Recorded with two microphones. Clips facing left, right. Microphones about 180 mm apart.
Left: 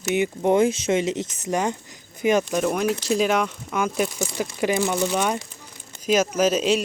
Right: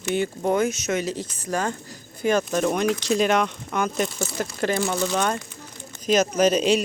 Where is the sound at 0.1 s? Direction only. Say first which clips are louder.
Left 3 dB; 20° left (ahead or behind).